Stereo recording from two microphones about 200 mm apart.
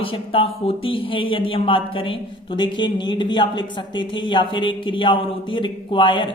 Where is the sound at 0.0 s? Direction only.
25° left (ahead or behind).